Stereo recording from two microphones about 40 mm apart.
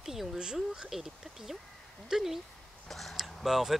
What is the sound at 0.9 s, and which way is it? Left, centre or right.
Speech, centre.